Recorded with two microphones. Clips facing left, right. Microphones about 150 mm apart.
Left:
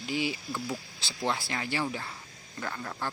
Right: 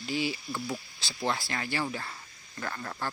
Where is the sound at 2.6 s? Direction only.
5° left (ahead or behind).